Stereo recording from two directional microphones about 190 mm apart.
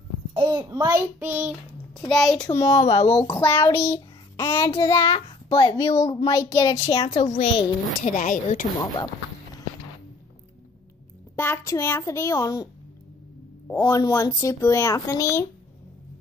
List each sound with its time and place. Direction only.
0.3 s child singing: 25° right (ahead or behind)
2.0 s a child's voice: centre (ahead or behind)
2.4 s a child's voice: 15° left (ahead or behind)
7.0 s a woman's voice: 35° left (ahead or behind)
8.0 s speech: 45° left (ahead or behind)
11.3 s a child's voice: 10° left (ahead or behind)
13.7 s a child's voice: 20° left (ahead or behind)